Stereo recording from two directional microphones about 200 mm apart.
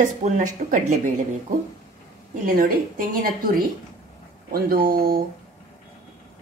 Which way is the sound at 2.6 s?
45° right (ahead or behind).